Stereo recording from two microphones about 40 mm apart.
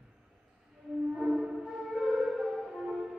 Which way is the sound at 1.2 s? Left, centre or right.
Centre.